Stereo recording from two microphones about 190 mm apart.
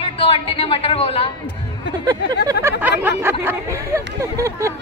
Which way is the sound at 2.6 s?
15° right (ahead or behind).